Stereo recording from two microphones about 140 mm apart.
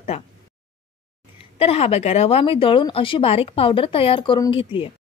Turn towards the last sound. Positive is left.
turn(degrees=40)  # may be behind; listen again after turning